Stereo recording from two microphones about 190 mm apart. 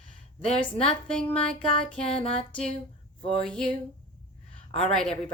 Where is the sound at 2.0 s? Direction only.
30° left (ahead or behind).